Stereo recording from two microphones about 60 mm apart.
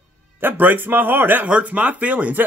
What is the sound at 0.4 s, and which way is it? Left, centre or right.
Speech, right.